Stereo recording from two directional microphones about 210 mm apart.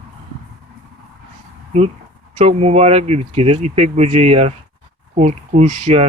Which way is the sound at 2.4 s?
30° right (ahead or behind).